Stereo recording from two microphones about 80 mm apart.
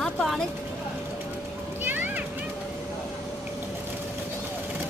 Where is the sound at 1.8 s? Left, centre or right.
Right.